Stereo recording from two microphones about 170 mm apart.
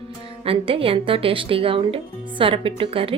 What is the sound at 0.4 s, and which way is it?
Speech, 30° right (ahead or behind).